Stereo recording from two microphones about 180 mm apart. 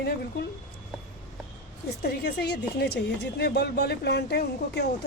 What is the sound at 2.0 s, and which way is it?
Speech, 65° left (ahead or behind).